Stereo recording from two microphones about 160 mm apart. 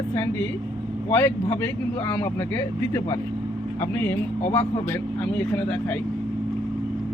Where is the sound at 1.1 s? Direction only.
15° left (ahead or behind).